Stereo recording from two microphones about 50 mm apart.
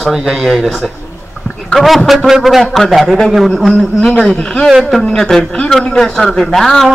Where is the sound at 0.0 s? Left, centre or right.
Centre.